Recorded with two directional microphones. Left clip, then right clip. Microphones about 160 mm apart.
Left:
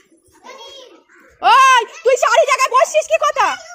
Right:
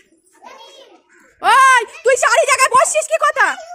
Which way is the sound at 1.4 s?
15° right (ahead or behind).